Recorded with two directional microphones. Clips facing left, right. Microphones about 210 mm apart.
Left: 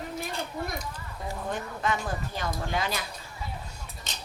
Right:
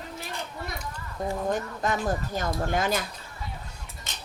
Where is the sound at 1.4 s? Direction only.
40° right (ahead or behind).